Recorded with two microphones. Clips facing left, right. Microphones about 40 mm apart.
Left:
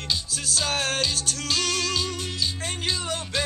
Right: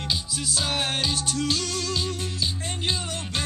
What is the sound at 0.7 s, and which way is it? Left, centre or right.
Music, left.